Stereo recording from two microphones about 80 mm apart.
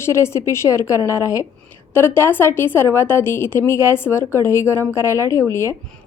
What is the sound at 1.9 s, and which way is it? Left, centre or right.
A woman's voice, left.